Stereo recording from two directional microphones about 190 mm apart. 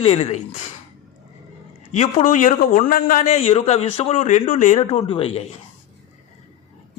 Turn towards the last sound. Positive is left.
turn(degrees=30)  # may be behind; listen again after turning